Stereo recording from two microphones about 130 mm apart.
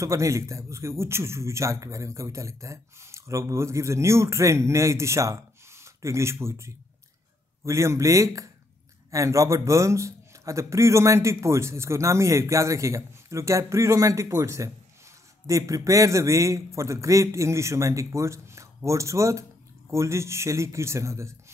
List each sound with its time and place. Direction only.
0.0 s speech: 25° right (ahead or behind)